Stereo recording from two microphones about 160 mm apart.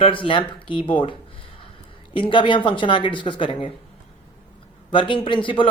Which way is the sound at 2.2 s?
30° left (ahead or behind).